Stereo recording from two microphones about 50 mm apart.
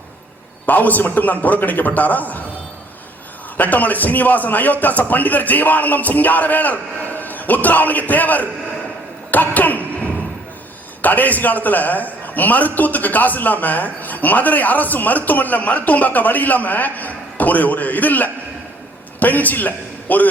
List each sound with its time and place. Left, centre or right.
0.6 s a man's voice: left
3.6 s a man's voice: left
11.0 s a man's voice: left